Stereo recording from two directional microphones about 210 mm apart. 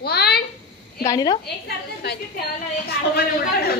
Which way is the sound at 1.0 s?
20° left (ahead or behind).